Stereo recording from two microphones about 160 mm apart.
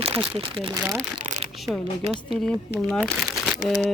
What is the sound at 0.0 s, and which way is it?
Speech, 35° right (ahead or behind).